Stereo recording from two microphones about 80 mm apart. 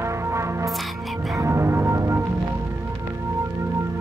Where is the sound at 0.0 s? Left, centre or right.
Right.